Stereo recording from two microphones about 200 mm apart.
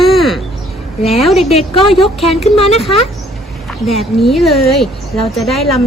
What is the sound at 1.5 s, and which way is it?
A woman's voice, 30° left (ahead or behind).